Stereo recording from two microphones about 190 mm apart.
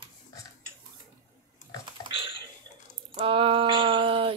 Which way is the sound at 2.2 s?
25° right (ahead or behind).